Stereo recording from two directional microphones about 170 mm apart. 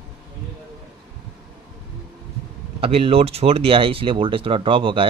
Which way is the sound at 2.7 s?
35° right (ahead or behind).